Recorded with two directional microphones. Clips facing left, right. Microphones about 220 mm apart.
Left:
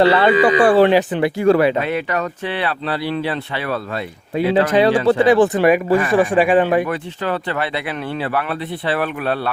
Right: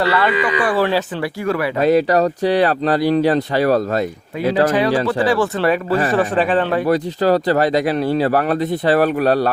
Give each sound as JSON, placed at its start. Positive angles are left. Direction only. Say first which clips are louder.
{"t": 0.0, "sound": "speech", "louder": "left 5 dB", "side_deg": 25}
{"t": 1.8, "sound": "speech", "louder": "right 8 dB", "side_deg": -35}
{"t": 5.0, "sound": "speech", "louder": "left 4 dB", "side_deg": 20}
{"t": 6.8, "sound": "speech", "louder": "right 7 dB", "side_deg": -35}